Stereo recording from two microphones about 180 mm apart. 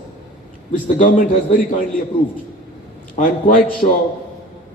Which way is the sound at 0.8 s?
45° left (ahead or behind).